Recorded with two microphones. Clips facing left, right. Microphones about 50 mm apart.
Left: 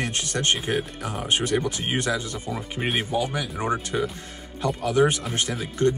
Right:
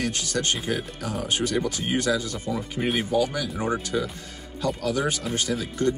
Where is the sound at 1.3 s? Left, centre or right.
Left.